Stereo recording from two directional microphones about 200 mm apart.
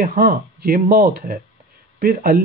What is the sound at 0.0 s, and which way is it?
Speech, 45° right (ahead or behind).